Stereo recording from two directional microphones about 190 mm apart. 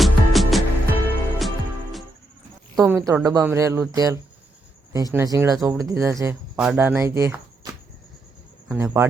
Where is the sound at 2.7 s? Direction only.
15° right (ahead or behind).